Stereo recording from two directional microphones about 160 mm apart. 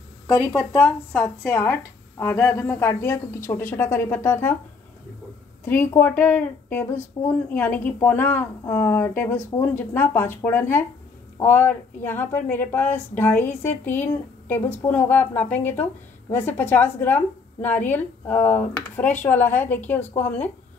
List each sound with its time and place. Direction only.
0.4 s speech: 10° left (ahead or behind)
5.7 s speech: 15° left (ahead or behind)